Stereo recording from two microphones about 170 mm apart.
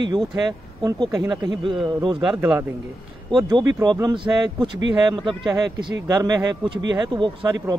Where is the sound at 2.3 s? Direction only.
15° right (ahead or behind).